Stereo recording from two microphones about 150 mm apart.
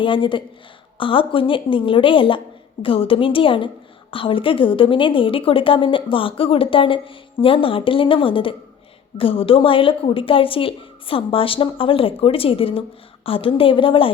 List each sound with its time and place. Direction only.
0.0 s a woman's voice: 35° left (ahead or behind)